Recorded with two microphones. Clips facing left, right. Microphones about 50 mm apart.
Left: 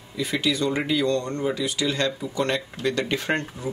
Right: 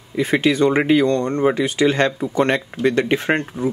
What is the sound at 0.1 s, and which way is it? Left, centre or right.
Speech, right.